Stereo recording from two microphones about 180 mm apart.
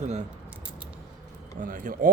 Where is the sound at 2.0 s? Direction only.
45° right (ahead or behind).